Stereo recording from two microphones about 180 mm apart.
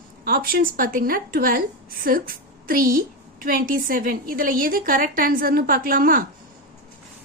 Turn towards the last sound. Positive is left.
turn(degrees=-50)  # may be behind; listen again after turning